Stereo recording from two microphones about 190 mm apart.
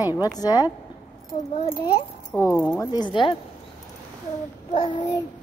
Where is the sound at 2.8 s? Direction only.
25° left (ahead or behind).